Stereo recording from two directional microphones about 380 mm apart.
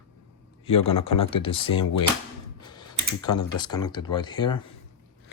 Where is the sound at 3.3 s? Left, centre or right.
Centre.